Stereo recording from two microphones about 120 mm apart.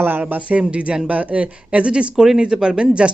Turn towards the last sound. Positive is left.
turn(degrees=-5)  # may be behind; listen again after turning